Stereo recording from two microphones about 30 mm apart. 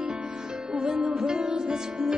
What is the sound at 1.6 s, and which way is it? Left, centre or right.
Music, right.